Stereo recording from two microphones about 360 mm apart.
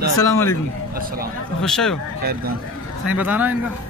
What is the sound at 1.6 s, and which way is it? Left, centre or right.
Speech, centre.